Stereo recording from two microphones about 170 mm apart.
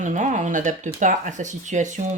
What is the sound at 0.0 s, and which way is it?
Speech, 45° right (ahead or behind).